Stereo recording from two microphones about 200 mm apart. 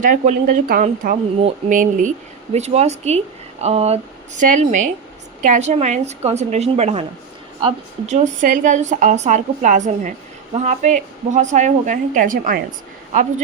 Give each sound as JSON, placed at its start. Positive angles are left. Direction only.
{"t": 0.0, "sound": "speech", "side_deg": -40}
{"t": 1.4, "sound": "speech", "side_deg": -30}